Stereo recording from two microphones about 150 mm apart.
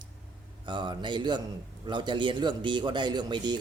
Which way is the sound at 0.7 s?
30° right (ahead or behind).